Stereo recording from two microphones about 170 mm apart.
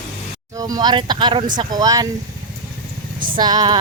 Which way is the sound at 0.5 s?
20° right (ahead or behind).